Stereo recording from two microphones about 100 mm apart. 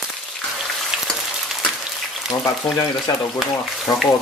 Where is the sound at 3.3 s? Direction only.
Centre (ahead or behind).